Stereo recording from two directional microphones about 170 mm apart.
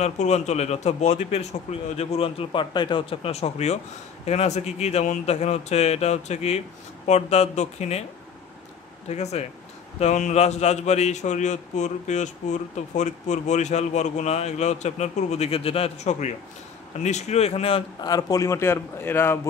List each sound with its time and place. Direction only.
0.0 s a man's voice: 40° left (ahead or behind)
9.1 s a man's voice: 40° left (ahead or behind)
18.1 s speech: 20° left (ahead or behind)